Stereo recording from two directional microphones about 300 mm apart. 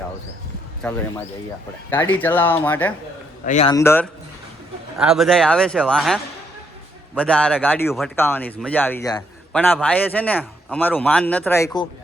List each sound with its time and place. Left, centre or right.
1.9 s speech: centre
3.4 s a man's voice: left
3.7 s speech: centre
7.2 s speech: centre